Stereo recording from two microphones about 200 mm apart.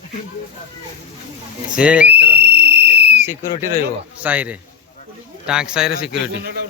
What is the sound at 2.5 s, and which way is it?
Whistle, 55° right (ahead or behind).